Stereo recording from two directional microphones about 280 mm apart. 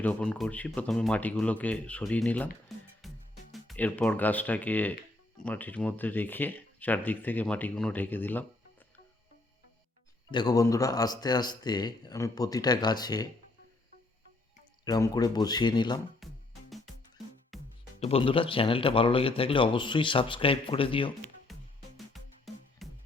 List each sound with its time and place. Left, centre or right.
0.0 s speech: centre
10.3 s speech: centre
14.8 s speech: centre
16.2 s music: centre
18.0 s speech: centre
21.5 s music: centre